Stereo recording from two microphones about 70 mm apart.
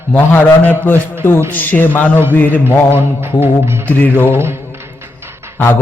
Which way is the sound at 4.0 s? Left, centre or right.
Left.